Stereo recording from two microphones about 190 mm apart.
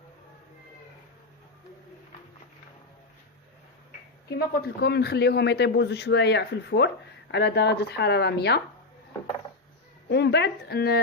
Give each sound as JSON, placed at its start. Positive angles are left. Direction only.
{"t": 4.3, "sound": "a man's voice", "side_deg": 55}
{"t": 10.1, "sound": "a man's voice", "side_deg": 60}